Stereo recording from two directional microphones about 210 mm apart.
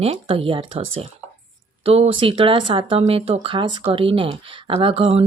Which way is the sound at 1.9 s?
25° right (ahead or behind).